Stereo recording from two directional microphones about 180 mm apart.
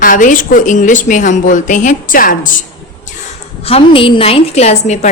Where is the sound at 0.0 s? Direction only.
45° left (ahead or behind).